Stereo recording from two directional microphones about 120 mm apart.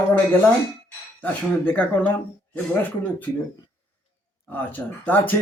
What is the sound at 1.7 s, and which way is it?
Speech, 10° left (ahead or behind).